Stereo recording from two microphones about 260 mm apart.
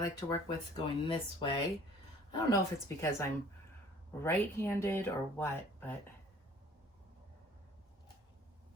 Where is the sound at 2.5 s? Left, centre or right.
Centre.